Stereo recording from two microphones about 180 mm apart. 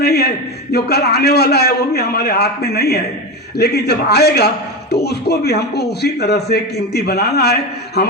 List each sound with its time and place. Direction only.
0.0 s a man's voice: 65° left (ahead or behind)